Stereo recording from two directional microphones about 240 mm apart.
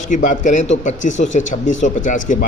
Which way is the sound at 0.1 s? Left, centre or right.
Left.